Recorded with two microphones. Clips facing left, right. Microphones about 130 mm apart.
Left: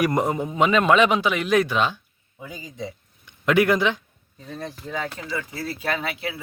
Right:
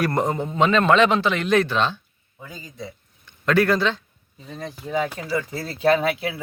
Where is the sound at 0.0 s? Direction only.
10° left (ahead or behind).